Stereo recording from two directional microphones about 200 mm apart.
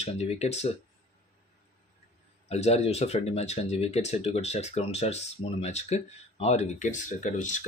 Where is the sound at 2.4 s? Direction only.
35° left (ahead or behind).